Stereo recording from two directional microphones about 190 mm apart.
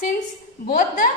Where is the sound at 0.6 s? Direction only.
45° left (ahead or behind).